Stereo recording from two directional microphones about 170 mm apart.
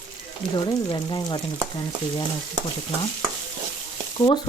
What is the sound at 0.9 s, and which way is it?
Frying, 25° left (ahead or behind).